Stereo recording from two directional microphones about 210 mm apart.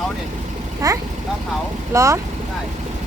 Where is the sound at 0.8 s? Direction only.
15° right (ahead or behind).